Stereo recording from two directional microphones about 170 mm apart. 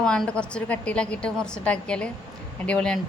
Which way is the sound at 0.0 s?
5° left (ahead or behind).